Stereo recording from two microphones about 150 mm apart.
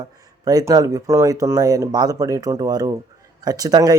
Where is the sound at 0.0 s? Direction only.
25° right (ahead or behind).